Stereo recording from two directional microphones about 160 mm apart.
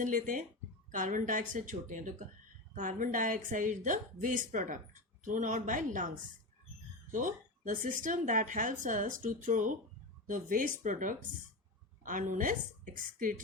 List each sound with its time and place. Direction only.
0.0 s speech: 55° right (ahead or behind)
7.1 s speech: 55° right (ahead or behind)